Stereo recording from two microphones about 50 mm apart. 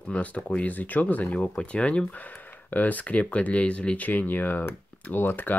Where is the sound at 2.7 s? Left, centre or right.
Left.